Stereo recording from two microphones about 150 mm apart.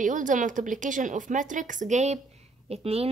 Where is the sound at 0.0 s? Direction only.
60° right (ahead or behind).